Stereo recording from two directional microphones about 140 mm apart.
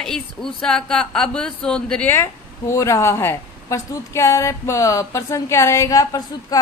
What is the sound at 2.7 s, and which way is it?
A woman's voice, 20° left (ahead or behind).